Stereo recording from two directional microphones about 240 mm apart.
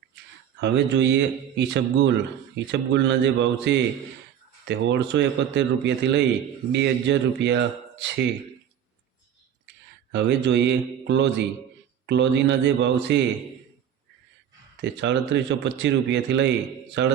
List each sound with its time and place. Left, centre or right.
0.6 s a man's voice: right
10.1 s a man's voice: right
14.8 s a man's voice: right